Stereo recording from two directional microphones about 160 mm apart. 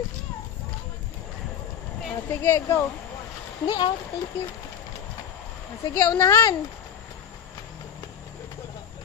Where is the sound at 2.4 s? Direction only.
15° left (ahead or behind).